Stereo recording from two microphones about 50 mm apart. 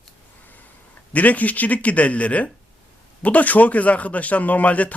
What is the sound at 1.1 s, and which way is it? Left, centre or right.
A man's voice, left.